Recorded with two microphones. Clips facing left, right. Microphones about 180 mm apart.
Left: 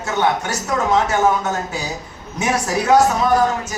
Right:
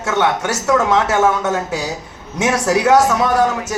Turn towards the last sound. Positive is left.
turn(degrees=-90)